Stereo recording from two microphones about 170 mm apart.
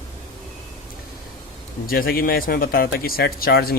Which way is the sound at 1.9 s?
60° left (ahead or behind).